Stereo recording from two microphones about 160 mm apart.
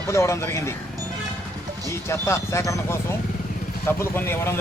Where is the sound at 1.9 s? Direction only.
15° left (ahead or behind).